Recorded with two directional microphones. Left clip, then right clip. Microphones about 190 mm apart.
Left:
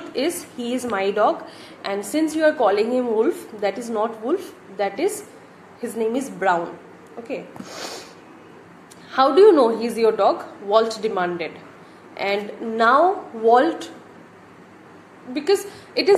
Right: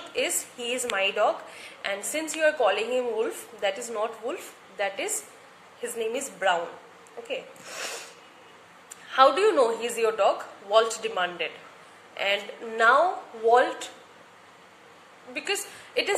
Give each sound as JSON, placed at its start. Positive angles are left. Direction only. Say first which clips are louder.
{"t": 0.1, "sound": "a woman's voice", "louder": "left 4 dB", "side_deg": -15}
{"t": 9.1, "sound": "a woman's voice", "louder": "left 6 dB", "side_deg": -15}
{"t": 15.3, "sound": "a woman's voice", "louder": "left 10 dB", "side_deg": -15}
{"t": 15.9, "sound": "speech", "louder": "left 9 dB", "side_deg": 20}